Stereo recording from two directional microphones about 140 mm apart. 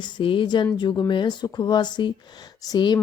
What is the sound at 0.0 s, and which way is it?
A woman's voice, 40° left (ahead or behind).